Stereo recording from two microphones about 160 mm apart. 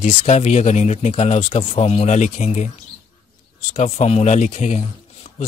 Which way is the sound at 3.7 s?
45° left (ahead or behind).